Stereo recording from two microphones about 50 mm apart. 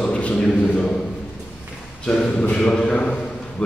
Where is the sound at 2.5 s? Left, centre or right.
Centre.